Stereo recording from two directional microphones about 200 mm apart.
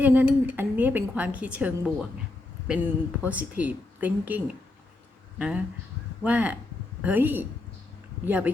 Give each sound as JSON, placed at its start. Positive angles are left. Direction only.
{"t": 0.0, "sound": "speech", "side_deg": -10}